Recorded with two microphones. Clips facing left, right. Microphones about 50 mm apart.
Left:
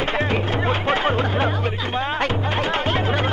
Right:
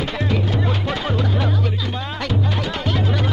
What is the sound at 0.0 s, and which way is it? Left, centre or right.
Music, left.